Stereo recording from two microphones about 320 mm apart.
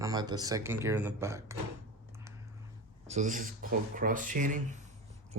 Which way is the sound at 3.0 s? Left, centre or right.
Right.